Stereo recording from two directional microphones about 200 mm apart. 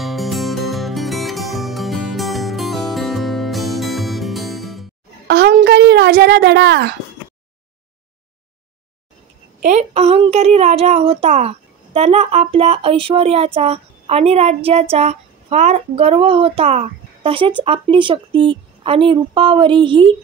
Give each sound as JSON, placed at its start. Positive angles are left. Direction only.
{"t": 0.0, "sound": "music", "side_deg": 0}
{"t": 5.3, "sound": "a sound", "side_deg": -55}
{"t": 9.6, "sound": "a woman's voice", "side_deg": -35}